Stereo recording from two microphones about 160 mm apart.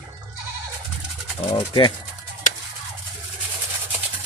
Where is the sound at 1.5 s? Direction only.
35° left (ahead or behind).